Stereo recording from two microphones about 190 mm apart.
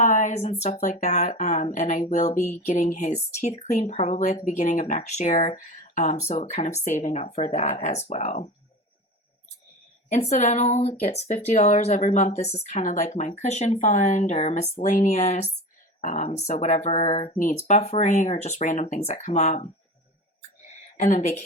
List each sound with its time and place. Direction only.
0.0 s speech: 40° left (ahead or behind)
10.1 s speech: 35° left (ahead or behind)
20.7 s a sound: 35° left (ahead or behind)